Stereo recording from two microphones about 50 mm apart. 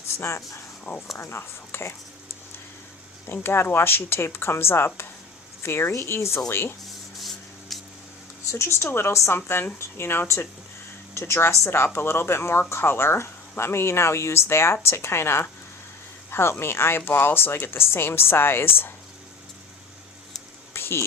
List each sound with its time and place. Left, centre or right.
0.2 s speech: left
3.4 s speech: left
6.5 s speech: left
6.8 s rub: centre
8.4 s speech: left
20.7 s a sound: left